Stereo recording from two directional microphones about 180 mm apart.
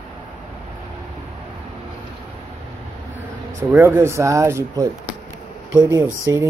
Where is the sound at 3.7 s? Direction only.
15° right (ahead or behind).